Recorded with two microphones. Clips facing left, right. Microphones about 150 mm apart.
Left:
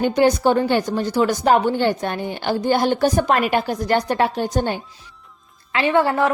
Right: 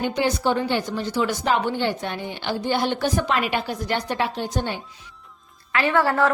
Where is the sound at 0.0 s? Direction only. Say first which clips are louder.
Left 6 dB; 45° left (ahead or behind).